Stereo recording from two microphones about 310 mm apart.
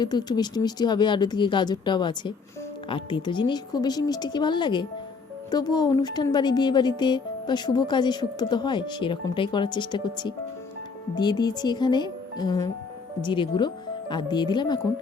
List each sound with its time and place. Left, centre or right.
0.0 s speech: centre